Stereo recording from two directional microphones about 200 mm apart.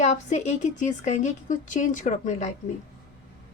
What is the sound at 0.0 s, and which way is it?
A woman's voice, 35° left (ahead or behind).